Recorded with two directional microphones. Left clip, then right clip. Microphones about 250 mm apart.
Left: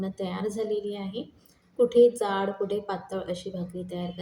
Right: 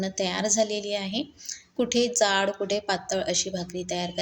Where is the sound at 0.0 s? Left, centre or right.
Right.